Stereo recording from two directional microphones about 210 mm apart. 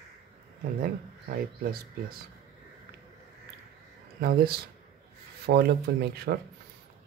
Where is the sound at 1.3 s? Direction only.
45° right (ahead or behind).